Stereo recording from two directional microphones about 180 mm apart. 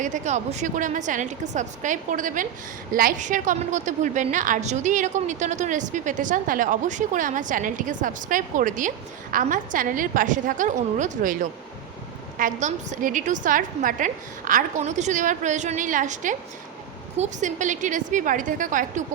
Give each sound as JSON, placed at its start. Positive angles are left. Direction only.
{"t": 0.0, "sound": "a woman's voice", "side_deg": -40}
{"t": 12.4, "sound": "a woman's voice", "side_deg": -45}